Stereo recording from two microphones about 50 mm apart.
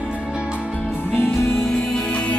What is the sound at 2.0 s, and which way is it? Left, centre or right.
Music, left.